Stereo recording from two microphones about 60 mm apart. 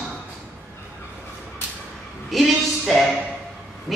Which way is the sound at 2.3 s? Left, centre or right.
Centre.